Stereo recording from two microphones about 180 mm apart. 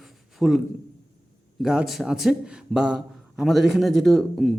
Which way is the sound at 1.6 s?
5° right (ahead or behind).